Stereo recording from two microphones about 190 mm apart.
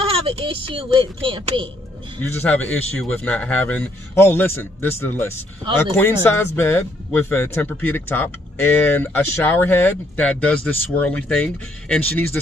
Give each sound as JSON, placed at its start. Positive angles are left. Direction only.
{"t": 0.1, "sound": "speech", "side_deg": -30}
{"t": 2.2, "sound": "speech", "side_deg": 10}